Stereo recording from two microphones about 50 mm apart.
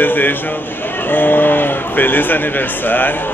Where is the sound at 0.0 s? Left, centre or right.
Left.